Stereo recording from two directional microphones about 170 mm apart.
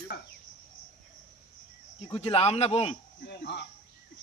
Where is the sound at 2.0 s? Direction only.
35° left (ahead or behind).